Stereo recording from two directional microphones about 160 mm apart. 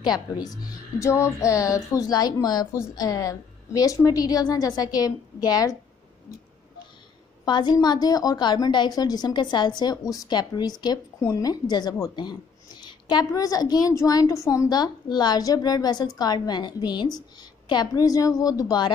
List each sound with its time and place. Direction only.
0.0 s a woman's voice: 25° left (ahead or behind)
7.4 s a woman's voice: 25° left (ahead or behind)